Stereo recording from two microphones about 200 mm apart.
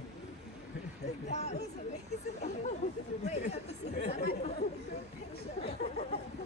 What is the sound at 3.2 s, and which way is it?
Chatter, 35° left (ahead or behind).